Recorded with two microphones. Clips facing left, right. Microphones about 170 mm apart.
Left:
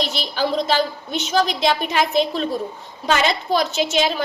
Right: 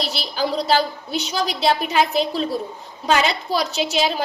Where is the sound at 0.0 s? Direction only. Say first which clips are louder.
Left 1 dB; 35° right (ahead or behind).